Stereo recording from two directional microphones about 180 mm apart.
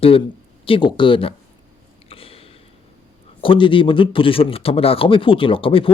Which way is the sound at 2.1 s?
30° left (ahead or behind).